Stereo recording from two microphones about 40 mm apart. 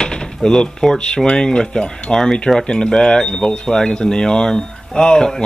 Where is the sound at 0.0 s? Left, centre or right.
Centre.